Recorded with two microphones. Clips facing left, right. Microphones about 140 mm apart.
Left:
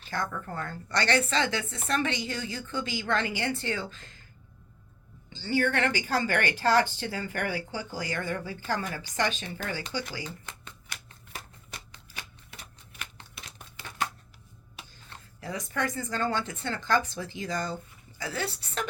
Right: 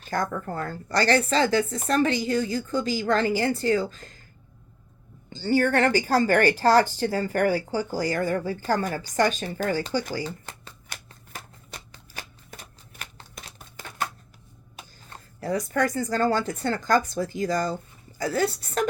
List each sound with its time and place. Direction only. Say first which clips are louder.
0.0 s speech: right 6 dB; 45° right (ahead or behind)
5.3 s speech: right 5 dB; 45° right (ahead or behind)
11.9 s shuffling cards: right 4 dB; 40° right (ahead or behind)
14.8 s a sound: right 3 dB; 45° right (ahead or behind)
16.0 s speech: right 6 dB; 40° right (ahead or behind)